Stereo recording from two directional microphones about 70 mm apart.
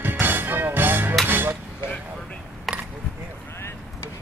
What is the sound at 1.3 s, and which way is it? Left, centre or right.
Cutlery, right.